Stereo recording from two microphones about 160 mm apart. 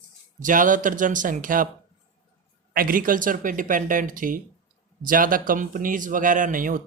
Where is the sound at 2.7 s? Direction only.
65° right (ahead or behind).